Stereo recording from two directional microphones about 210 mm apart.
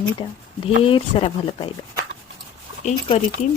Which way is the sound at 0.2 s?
25° left (ahead or behind).